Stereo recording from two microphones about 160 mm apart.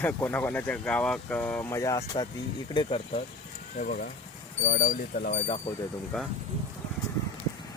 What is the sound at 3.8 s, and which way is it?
Speech, 65° left (ahead or behind).